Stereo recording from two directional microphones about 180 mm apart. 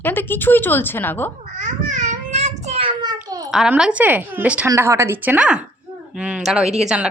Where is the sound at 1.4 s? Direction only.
45° right (ahead or behind).